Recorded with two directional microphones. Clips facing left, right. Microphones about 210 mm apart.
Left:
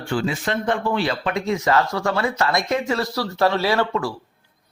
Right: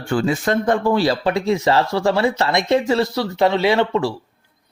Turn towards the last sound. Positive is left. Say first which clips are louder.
# right 4 dB
turn(degrees=-25)  # may be behind; listen again after turning